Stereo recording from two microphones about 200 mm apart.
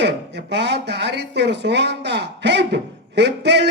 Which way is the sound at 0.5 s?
60° right (ahead or behind).